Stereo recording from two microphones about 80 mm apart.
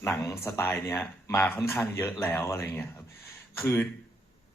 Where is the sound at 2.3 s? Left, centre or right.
Left.